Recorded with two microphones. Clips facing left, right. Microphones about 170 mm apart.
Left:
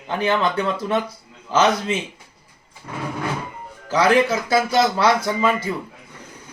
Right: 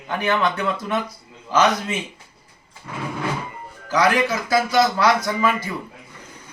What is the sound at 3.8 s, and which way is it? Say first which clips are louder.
Speech: left 2 dB; 25° left (ahead or behind).